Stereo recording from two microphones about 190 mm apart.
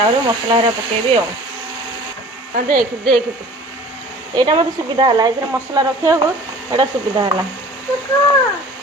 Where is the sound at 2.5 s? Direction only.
45° right (ahead or behind).